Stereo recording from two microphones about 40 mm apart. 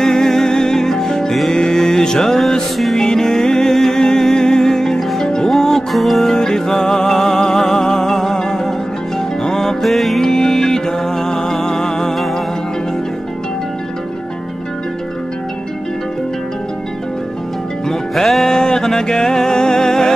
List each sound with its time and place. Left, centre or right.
0.0 s music: centre
5.9 s music: centre
6.2 s music: centre
10.3 s music: centre
17.8 s music: centre